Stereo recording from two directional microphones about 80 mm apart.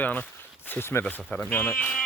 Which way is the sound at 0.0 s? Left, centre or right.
Left.